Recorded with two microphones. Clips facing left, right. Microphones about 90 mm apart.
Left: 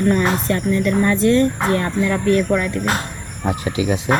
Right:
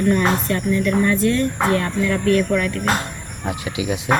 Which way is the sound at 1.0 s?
30° left (ahead or behind).